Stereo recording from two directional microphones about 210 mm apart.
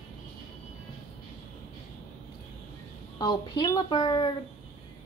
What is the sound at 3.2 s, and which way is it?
A woman's voice, 20° left (ahead or behind).